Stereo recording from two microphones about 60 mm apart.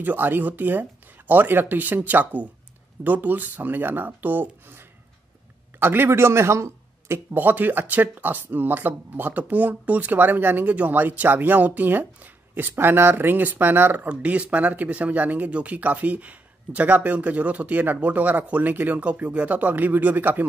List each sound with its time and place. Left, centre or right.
0.0 s speech: right
7.3 s speech: right
14.0 s speech: right